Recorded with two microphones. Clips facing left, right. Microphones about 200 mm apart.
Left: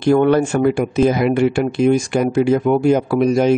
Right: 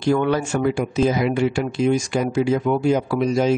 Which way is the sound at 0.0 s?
55° left (ahead or behind).